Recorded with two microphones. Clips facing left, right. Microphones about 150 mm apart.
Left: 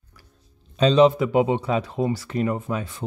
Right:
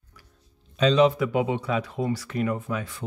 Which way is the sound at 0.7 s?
30° left (ahead or behind).